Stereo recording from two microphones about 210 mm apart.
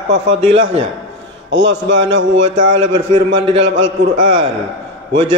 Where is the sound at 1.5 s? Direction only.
60° right (ahead or behind).